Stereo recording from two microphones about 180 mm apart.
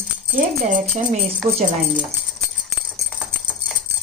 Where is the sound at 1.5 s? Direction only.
35° right (ahead or behind).